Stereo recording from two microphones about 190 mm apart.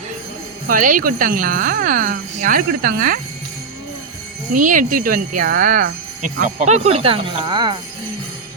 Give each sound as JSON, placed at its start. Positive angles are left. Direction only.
{"t": 0.7, "sound": "speech", "side_deg": -45}
{"t": 4.5, "sound": "speech", "side_deg": -45}